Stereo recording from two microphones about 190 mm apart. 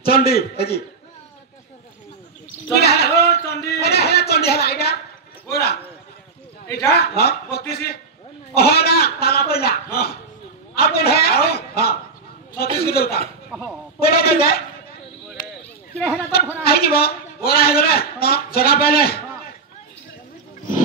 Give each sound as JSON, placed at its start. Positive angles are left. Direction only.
{"t": 0.0, "sound": "a man's voice", "side_deg": 55}
{"t": 2.7, "sound": "a man's voice", "side_deg": 60}
{"t": 6.9, "sound": "a man's voice", "side_deg": 55}
{"t": 13.5, "sound": "speech", "side_deg": 0}
{"t": 13.9, "sound": "a man's voice", "side_deg": 55}
{"t": 15.2, "sound": "a sound", "side_deg": 0}
{"t": 16.6, "sound": "a woman's voice", "side_deg": 55}